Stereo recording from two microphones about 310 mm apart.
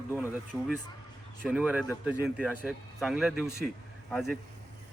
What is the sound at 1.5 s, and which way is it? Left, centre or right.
A man's voice, centre.